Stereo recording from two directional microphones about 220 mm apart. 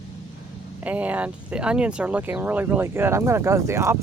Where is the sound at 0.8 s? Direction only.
5° right (ahead or behind).